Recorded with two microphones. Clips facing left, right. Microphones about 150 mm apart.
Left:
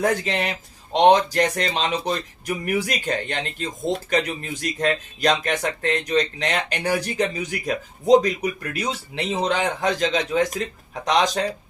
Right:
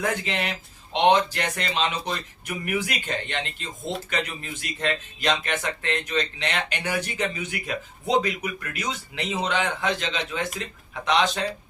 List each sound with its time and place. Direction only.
0.0 s speech: 40° left (ahead or behind)